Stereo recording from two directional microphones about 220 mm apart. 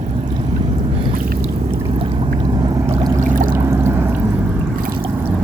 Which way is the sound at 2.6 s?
20° right (ahead or behind).